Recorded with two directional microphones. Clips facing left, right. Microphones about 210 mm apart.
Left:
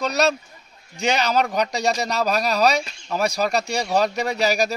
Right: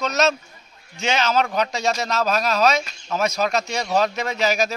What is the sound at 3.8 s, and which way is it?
Speech, 15° left (ahead or behind).